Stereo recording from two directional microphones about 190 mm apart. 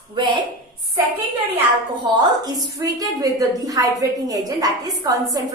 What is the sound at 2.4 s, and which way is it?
A woman's voice, 20° right (ahead or behind).